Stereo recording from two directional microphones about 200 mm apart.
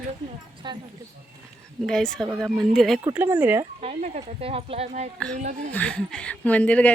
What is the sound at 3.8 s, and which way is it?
Speech, 30° right (ahead or behind).